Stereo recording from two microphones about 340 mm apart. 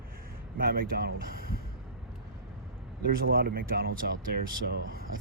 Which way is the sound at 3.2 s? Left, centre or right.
Right.